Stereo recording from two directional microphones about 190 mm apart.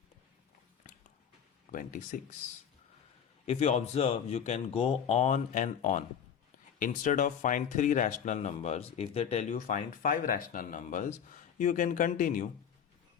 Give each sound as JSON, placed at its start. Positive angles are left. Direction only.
{"t": 1.7, "sound": "speech", "side_deg": 45}
{"t": 3.4, "sound": "speech", "side_deg": 35}